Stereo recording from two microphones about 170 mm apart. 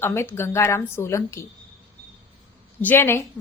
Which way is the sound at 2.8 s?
15° left (ahead or behind).